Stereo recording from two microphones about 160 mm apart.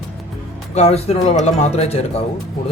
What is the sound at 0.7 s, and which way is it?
Speech, 40° left (ahead or behind).